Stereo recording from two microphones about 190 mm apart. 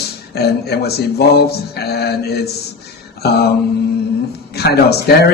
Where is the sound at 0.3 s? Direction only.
55° left (ahead or behind).